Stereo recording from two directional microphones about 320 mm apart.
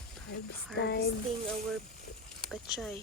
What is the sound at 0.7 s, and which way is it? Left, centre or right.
Speech, left.